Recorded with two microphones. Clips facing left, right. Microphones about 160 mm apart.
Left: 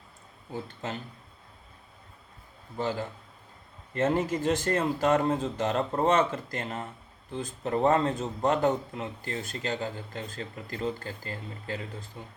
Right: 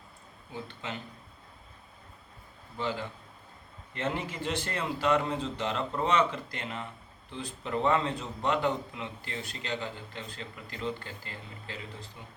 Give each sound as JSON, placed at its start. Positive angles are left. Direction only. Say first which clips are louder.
{"t": 0.5, "sound": "speech", "louder": "left 4 dB", "side_deg": 40}
{"t": 2.7, "sound": "a man's voice", "louder": "left 3 dB", "side_deg": 40}